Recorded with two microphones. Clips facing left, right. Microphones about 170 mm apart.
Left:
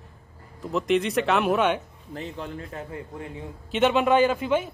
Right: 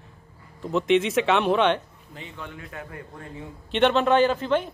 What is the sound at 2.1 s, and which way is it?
Speech, 40° left (ahead or behind).